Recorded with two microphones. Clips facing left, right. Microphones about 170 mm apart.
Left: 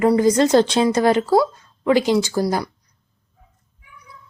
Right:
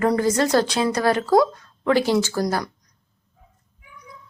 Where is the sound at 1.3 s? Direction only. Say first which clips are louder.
Even; 5° left (ahead or behind).